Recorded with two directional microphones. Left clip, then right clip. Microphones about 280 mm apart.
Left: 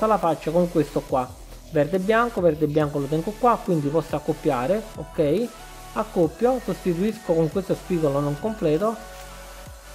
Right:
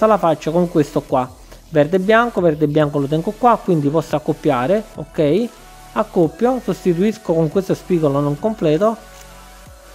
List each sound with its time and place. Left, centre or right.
0.0 s speech: right